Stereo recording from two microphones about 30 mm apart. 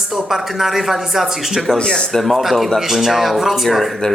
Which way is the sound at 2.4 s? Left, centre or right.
Centre.